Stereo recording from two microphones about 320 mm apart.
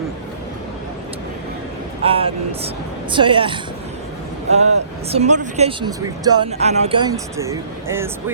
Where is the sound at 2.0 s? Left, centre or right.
Centre.